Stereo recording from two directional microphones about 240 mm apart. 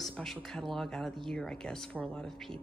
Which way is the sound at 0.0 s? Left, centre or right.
Centre.